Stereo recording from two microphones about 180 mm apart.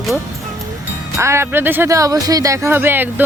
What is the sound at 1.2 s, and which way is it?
Speech, 15° right (ahead or behind).